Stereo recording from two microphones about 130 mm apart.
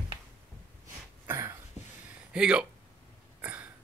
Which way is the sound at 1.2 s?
20° right (ahead or behind).